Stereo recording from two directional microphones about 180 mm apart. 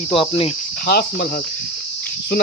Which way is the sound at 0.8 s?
60° left (ahead or behind).